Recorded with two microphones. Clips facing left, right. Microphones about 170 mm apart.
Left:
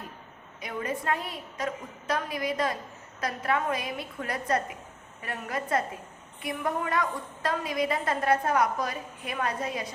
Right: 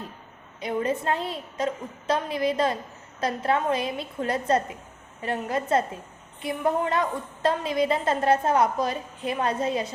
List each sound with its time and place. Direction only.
0.6 s a woman's voice: 25° right (ahead or behind)